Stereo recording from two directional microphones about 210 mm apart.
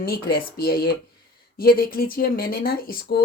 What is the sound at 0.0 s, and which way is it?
Speech, 45° left (ahead or behind).